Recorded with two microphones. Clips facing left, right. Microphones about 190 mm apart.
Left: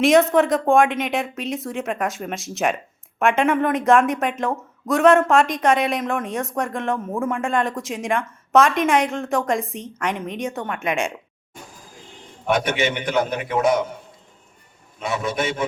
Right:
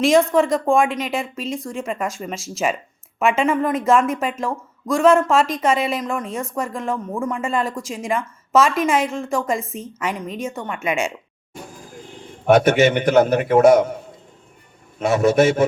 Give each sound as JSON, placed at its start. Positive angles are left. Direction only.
{"t": 0.0, "sound": "speech", "side_deg": 0}
{"t": 12.5, "sound": "a man's voice", "side_deg": -45}
{"t": 14.9, "sound": "a man's voice", "side_deg": -50}